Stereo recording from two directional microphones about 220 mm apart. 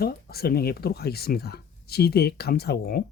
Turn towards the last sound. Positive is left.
turn(degrees=45)  # may be behind; listen again after turning